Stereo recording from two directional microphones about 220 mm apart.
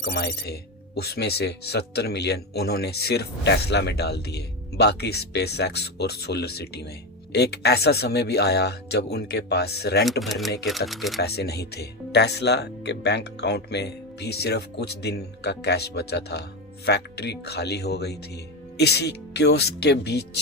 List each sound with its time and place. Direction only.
0.0 s speech: 50° left (ahead or behind)
10.1 s speech: centre (ahead or behind)
11.2 s speech: 45° left (ahead or behind)